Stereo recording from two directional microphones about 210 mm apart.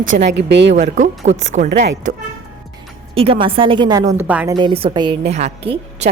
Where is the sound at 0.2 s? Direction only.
55° right (ahead or behind).